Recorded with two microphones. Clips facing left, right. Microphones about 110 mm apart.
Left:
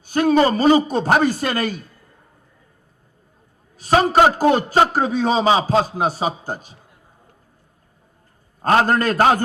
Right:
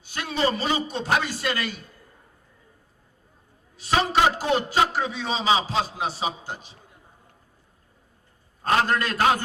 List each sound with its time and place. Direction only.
0.0 s a man's voice: 45° left (ahead or behind)
3.8 s a man's voice: 45° left (ahead or behind)
8.6 s a man's voice: 45° left (ahead or behind)